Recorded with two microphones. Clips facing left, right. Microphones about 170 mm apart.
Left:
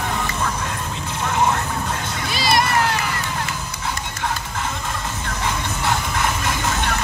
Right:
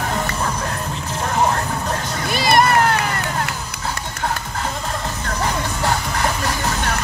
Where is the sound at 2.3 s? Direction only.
55° right (ahead or behind).